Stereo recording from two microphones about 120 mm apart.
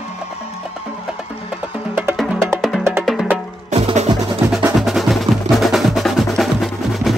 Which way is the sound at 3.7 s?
65° right (ahead or behind).